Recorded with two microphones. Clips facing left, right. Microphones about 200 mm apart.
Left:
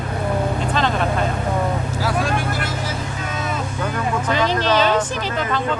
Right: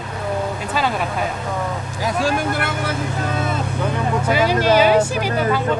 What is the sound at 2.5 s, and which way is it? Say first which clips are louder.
Speech: right 2 dB; 60° right (ahead or behind).